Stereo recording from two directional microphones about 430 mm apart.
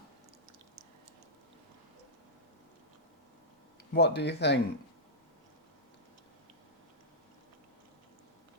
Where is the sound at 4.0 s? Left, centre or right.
Left.